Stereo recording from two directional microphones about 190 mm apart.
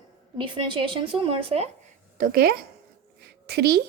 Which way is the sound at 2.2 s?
50° right (ahead or behind).